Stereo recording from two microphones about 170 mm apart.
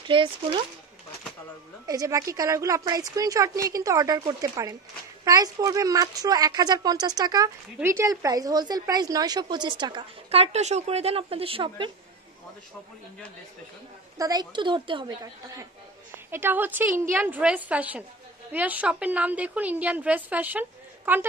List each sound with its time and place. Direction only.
0.1 s speech: 30° right (ahead or behind)
1.9 s a woman's voice: 20° right (ahead or behind)
14.1 s a woman's voice: 20° right (ahead or behind)